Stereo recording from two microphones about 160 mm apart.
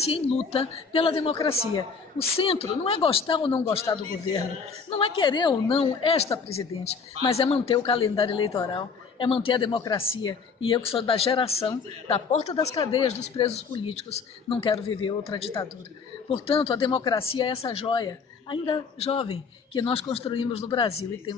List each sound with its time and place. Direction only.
0.0 s a woman's voice: 40° left (ahead or behind)
4.8 s a woman's voice: 35° left (ahead or behind)
18.9 s a man's voice: 40° left (ahead or behind)
19.2 s a woman's voice: 30° left (ahead or behind)